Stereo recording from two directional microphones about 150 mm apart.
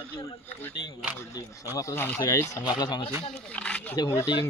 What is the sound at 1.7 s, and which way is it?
Speech, 15° left (ahead or behind).